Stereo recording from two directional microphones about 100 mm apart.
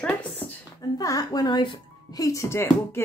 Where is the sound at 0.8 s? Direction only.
40° left (ahead or behind).